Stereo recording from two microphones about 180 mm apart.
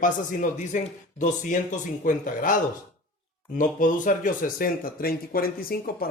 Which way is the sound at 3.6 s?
45° left (ahead or behind).